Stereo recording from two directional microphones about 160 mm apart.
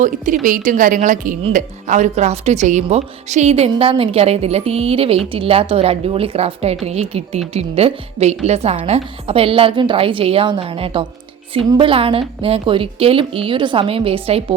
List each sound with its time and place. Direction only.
0.0 s a woman's voice: 55° right (ahead or behind); by 14.4 s 35° right (ahead or behind)